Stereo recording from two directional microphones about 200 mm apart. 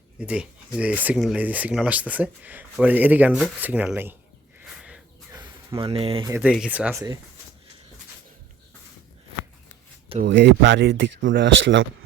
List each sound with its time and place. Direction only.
0.2 s speech: 5° right (ahead or behind)
5.3 s a sound: 25° right (ahead or behind)
6.2 s speech: 15° right (ahead or behind)
10.2 s speech: 60° right (ahead or behind)